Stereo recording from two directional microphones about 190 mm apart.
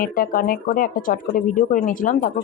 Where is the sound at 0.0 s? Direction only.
50° left (ahead or behind).